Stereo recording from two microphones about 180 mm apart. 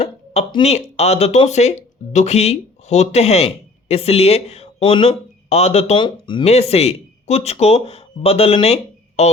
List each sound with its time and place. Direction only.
0.0 s speech: 30° left (ahead or behind)